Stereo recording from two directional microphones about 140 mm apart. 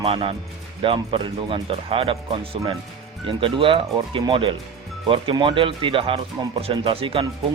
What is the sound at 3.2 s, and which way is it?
Speech, 40° right (ahead or behind).